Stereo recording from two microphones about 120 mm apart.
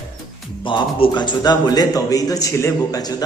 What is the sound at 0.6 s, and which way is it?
A man's voice, 40° left (ahead or behind).